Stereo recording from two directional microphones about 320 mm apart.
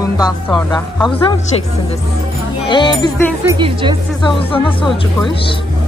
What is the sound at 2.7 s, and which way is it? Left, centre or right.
Speech, centre.